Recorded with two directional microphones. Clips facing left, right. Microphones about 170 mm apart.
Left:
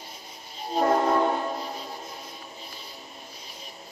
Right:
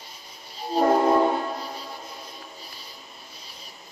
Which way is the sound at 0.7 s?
30° right (ahead or behind).